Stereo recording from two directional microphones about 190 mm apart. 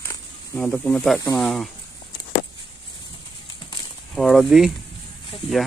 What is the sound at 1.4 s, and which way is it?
Speech, centre (ahead or behind).